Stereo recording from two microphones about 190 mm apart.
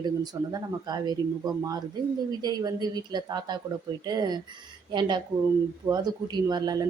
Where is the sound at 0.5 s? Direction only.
20° right (ahead or behind).